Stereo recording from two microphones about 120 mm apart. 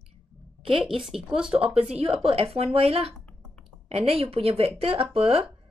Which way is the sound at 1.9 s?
60° right (ahead or behind).